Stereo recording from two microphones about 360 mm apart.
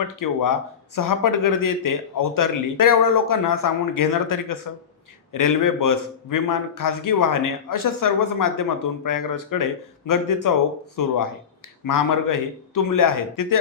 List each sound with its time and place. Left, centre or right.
0.2 s speech: left